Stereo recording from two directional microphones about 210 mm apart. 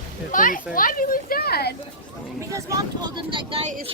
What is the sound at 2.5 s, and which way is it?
Speech, 15° right (ahead or behind).